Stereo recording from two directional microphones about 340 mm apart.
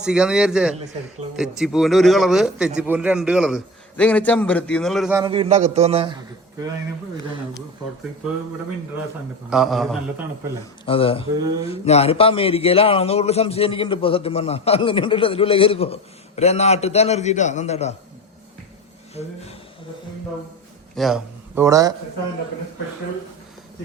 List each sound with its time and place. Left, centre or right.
0.0 s a man's voice: centre
9.5 s a man's voice: centre
10.8 s a man's voice: centre
19.1 s speech: centre
20.9 s a man's voice: centre